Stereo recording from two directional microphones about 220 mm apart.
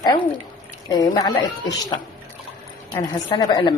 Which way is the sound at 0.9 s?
20° left (ahead or behind).